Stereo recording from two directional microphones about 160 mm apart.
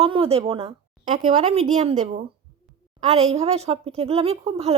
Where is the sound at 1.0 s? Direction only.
45° right (ahead or behind).